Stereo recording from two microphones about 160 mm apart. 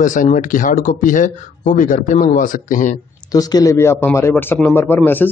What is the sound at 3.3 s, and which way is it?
A man's voice, 25° left (ahead or behind).